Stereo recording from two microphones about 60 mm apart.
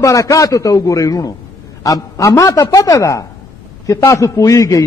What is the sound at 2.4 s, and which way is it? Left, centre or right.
A man's voice, left.